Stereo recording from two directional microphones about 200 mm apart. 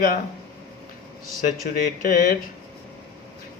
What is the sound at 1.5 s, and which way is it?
Speech, 45° left (ahead or behind).